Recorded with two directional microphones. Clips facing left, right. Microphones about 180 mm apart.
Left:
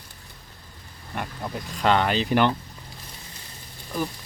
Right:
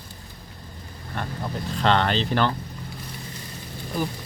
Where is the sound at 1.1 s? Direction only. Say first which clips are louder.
Right 1 dB; 10° left (ahead or behind).